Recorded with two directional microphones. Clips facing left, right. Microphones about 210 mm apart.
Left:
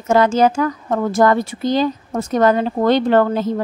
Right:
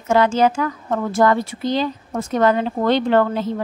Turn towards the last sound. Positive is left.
turn(degrees=45)  # may be behind; listen again after turning